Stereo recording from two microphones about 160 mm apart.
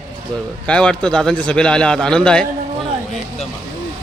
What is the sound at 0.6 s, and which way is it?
A man's voice, 5° left (ahead or behind).